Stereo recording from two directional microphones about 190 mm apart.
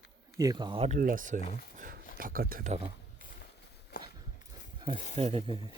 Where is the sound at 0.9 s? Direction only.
45° right (ahead or behind).